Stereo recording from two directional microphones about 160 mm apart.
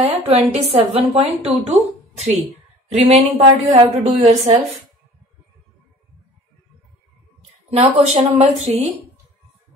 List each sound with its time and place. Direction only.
0.0 s a woman's voice: 35° right (ahead or behind)
7.7 s a woman's voice: 40° right (ahead or behind)